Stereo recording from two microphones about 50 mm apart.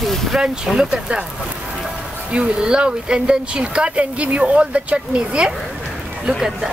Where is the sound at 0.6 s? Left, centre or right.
Centre.